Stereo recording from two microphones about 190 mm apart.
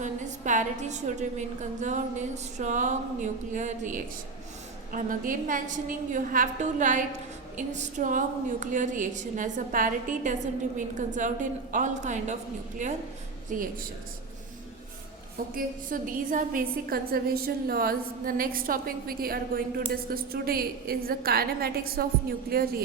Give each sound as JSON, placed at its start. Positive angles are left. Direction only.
{"t": 0.0, "sound": "a woman's voice", "side_deg": -40}
{"t": 15.5, "sound": "a woman's voice", "side_deg": -45}